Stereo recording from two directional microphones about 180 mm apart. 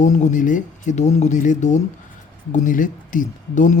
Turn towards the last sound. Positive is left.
turn(degrees=45)  # may be behind; listen again after turning